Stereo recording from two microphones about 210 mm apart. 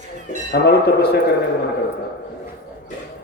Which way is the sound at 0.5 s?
50° left (ahead or behind).